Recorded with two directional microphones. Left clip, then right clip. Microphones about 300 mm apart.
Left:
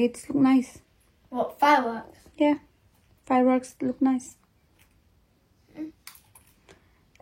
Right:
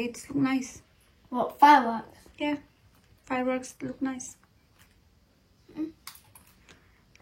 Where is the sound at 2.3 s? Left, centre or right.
Centre.